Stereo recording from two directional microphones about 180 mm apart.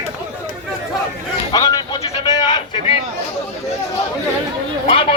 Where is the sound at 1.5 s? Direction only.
20° left (ahead or behind).